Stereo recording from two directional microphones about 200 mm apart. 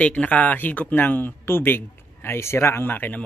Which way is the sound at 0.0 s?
5° left (ahead or behind).